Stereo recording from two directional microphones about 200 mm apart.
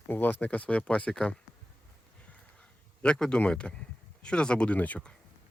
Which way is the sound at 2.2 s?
5° left (ahead or behind).